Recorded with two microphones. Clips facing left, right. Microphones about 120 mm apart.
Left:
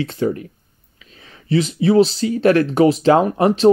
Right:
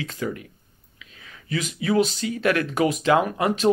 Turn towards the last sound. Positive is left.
turn(degrees=30)  # may be behind; listen again after turning